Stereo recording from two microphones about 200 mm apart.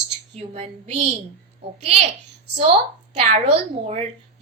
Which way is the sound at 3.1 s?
30° right (ahead or behind).